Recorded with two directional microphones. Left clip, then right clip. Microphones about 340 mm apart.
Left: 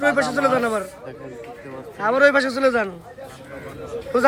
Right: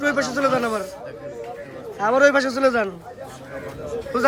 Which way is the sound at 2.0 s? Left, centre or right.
Centre.